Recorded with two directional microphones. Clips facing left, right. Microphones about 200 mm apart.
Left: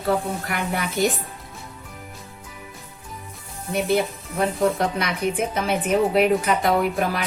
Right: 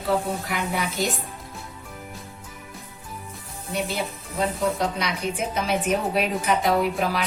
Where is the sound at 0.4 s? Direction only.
55° left (ahead or behind).